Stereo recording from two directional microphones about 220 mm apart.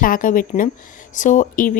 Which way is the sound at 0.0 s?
40° left (ahead or behind).